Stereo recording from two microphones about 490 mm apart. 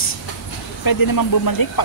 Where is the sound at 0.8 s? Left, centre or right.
Left.